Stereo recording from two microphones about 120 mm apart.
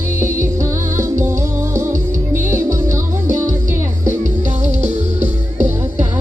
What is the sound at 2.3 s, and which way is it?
Music, 20° right (ahead or behind).